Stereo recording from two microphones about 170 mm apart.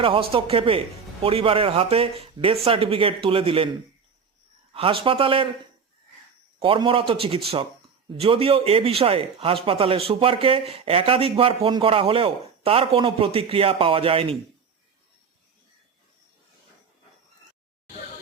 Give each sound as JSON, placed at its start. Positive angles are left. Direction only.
{"t": 0.0, "sound": "speech", "side_deg": -30}
{"t": 6.6, "sound": "speech", "side_deg": -30}